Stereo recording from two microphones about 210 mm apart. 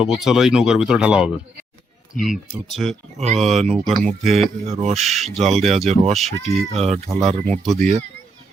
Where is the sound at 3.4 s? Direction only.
Centre (ahead or behind).